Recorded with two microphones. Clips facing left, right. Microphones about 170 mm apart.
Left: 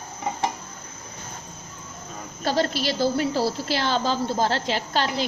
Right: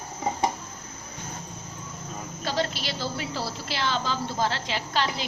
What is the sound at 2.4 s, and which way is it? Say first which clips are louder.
A woman's voice: left 6 dB; 40° left (ahead or behind).